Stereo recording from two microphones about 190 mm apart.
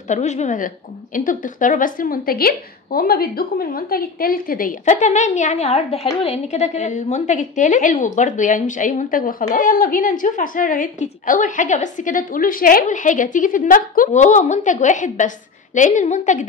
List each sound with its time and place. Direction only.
0.1 s a woman's voice: 35° left (ahead or behind)